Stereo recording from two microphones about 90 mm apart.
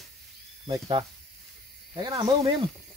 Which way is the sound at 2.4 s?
65° right (ahead or behind).